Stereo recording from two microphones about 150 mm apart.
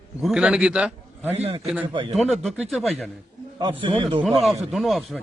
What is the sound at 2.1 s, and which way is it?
Speech, centre (ahead or behind).